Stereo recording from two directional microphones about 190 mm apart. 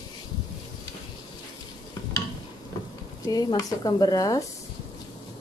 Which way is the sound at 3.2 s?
20° left (ahead or behind).